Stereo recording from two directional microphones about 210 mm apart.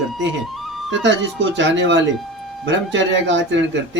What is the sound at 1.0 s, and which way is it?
Speech, 60° right (ahead or behind).